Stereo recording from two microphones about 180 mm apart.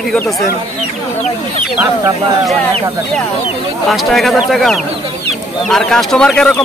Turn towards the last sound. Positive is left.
turn(degrees=5)  # may be behind; listen again after turning